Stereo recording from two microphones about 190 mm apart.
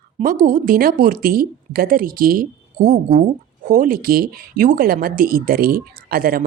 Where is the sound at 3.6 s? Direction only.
45° right (ahead or behind).